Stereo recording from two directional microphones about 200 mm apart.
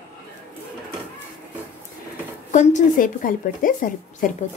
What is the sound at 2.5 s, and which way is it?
A woman's voice, 40° left (ahead or behind).